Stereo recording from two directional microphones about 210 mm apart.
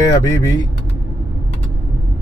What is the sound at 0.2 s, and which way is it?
Speech, 15° left (ahead or behind).